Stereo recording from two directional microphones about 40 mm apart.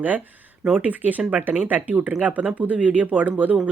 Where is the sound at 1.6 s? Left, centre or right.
Right.